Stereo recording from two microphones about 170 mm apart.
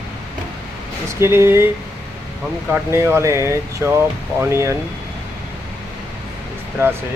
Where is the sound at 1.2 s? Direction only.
15° right (ahead or behind).